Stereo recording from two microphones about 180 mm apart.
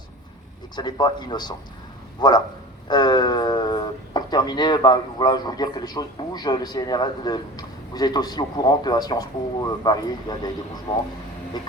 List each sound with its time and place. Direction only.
0.8 s speech: 25° left (ahead or behind)